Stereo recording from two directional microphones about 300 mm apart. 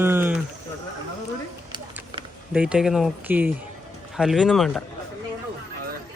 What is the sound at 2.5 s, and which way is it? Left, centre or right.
Speech, centre.